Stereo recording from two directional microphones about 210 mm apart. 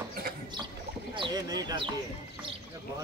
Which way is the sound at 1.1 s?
20° right (ahead or behind).